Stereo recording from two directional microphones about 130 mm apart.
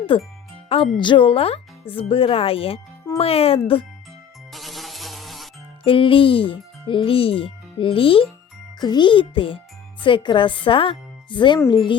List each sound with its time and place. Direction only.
0.1 s a child's voice: 40° left (ahead or behind)
4.5 s insect: centre (ahead or behind)
5.8 s a child's voice: 40° left (ahead or behind)